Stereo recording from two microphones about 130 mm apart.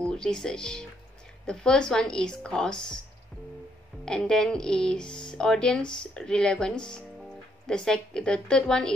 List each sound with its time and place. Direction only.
0.0 s speech: 5° left (ahead or behind)
4.0 s speech: 5° left (ahead or behind)